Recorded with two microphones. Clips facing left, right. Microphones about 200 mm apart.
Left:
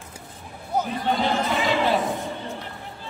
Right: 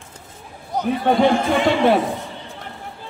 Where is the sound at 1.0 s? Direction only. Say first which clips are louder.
Right 10 dB; 55° right (ahead or behind).